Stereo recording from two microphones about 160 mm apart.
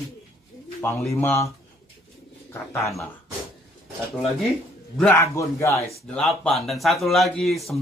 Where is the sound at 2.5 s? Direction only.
15° left (ahead or behind).